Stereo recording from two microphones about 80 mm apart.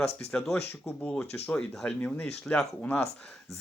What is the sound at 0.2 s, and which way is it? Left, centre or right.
Speech, centre.